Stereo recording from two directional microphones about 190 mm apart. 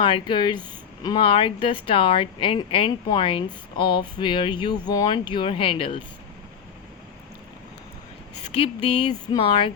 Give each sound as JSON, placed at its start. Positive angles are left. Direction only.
{"t": 0.0, "sound": "speech", "side_deg": 25}
{"t": 8.5, "sound": "speech", "side_deg": 30}